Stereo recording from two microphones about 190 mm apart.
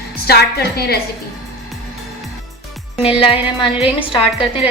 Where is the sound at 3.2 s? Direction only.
30° left (ahead or behind).